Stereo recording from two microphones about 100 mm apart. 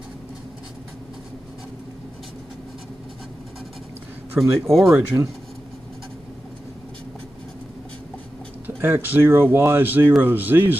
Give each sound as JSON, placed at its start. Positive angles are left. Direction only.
{"t": 4.4, "sound": "speech", "side_deg": 0}
{"t": 8.6, "sound": "speech", "side_deg": -20}